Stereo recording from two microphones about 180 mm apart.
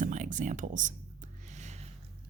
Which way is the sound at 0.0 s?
45° right (ahead or behind).